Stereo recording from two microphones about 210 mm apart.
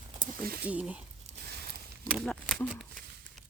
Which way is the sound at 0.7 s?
5° right (ahead or behind).